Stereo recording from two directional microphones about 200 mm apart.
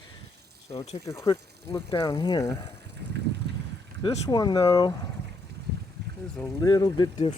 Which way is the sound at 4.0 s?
20° left (ahead or behind).